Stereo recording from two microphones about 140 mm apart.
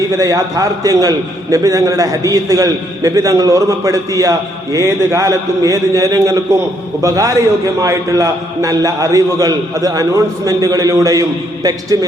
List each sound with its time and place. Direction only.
0.2 s a man's voice: 25° right (ahead or behind)